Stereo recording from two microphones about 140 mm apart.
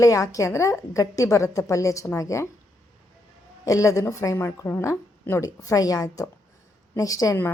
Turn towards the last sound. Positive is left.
turn(degrees=25)  # may be behind; listen again after turning